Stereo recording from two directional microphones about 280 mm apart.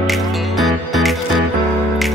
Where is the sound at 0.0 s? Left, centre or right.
Centre.